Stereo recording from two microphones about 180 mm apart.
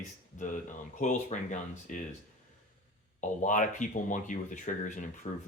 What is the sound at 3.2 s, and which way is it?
Speech, 45° left (ahead or behind).